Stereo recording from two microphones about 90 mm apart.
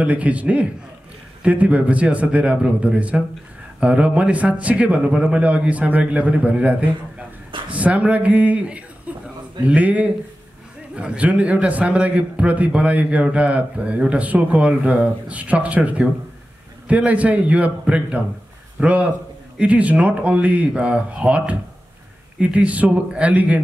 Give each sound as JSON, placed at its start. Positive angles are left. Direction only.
{"t": 0.0, "sound": "a man's voice", "side_deg": -15}